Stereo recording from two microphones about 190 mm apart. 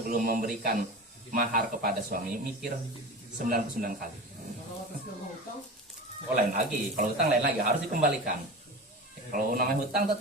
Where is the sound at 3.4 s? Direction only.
45° right (ahead or behind).